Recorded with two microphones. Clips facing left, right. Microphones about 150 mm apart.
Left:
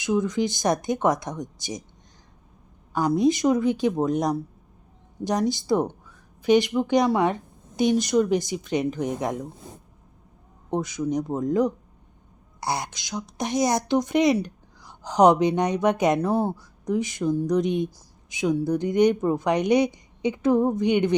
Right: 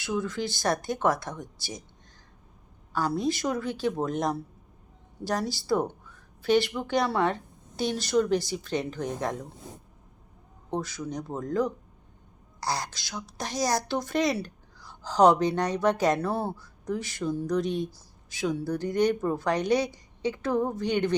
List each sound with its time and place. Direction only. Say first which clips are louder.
0.0 s a woman's voice: left 7 dB; 15° left (ahead or behind)
2.9 s a woman's voice: left 7 dB; 15° left (ahead or behind)
5.2 s a woman's voice: left 6 dB; 20° left (ahead or behind)
10.7 s speech: left 6 dB; 20° left (ahead or behind)